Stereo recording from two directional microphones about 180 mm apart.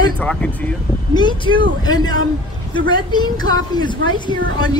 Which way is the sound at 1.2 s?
25° left (ahead or behind).